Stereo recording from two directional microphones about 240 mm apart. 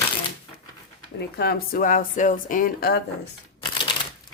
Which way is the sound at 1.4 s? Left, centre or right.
Left.